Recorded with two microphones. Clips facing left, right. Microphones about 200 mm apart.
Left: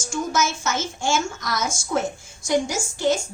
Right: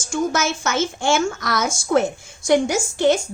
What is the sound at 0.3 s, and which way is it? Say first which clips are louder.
A woman's voice: right 3 dB; 65° right (ahead or behind).